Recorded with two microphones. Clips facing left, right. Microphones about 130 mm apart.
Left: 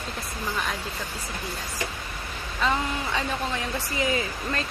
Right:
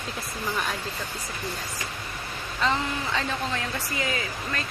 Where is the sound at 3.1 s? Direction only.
20° left (ahead or behind).